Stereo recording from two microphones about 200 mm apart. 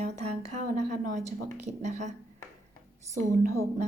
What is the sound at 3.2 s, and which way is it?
Speech, 40° right (ahead or behind).